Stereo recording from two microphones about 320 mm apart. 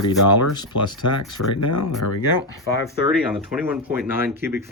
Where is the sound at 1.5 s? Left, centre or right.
Left.